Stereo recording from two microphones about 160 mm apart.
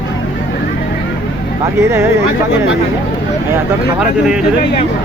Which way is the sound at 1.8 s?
15° right (ahead or behind).